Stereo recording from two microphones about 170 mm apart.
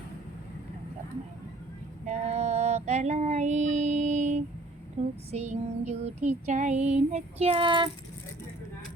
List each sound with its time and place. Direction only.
2.0 s child singing: 40° right (ahead or behind)